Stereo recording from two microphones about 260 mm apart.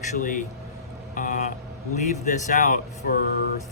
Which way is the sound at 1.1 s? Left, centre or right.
Left.